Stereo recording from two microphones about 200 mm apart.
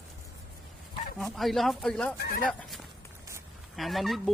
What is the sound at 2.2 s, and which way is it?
Speech, 45° left (ahead or behind).